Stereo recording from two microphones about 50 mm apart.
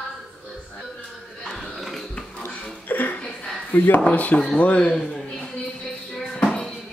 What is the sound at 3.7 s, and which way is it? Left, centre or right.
Speech, left.